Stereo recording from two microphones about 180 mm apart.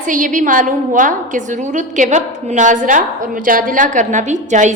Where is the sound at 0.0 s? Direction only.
45° right (ahead or behind).